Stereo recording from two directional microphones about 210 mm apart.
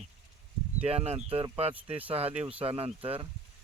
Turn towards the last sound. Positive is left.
turn(degrees=-25)  # may be behind; listen again after turning